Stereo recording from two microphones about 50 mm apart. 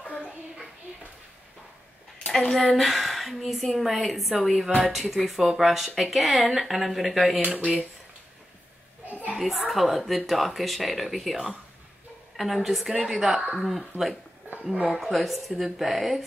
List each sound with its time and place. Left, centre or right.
2.5 s speech: centre
7.4 s speech: right
9.0 s a sound: right
9.4 s speech: centre
12.4 s speech: centre